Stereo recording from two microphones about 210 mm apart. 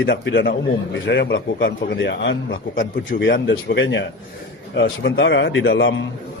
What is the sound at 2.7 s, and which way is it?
Speech, 40° left (ahead or behind).